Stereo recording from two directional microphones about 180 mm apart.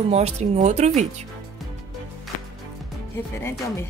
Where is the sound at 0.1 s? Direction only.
40° right (ahead or behind).